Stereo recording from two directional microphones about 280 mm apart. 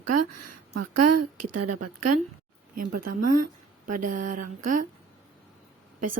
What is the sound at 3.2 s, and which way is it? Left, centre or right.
Speech, right.